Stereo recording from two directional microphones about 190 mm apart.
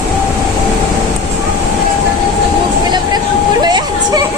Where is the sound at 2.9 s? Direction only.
20° right (ahead or behind).